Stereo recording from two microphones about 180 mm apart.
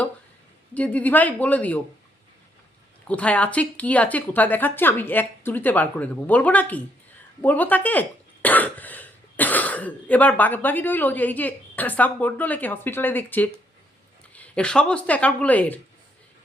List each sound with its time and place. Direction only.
0.7 s speech: 10° left (ahead or behind)
3.1 s speech: 5° left (ahead or behind)